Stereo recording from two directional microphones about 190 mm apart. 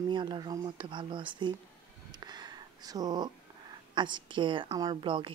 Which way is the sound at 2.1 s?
20° right (ahead or behind).